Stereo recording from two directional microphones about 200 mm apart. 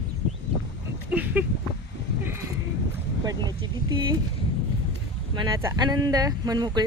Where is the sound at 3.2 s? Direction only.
20° right (ahead or behind).